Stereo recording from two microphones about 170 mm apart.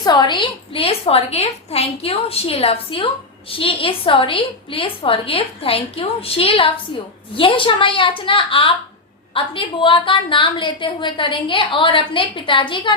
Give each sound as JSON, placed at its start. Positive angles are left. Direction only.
{"t": 0.0, "sound": "a woman's voice", "side_deg": 25}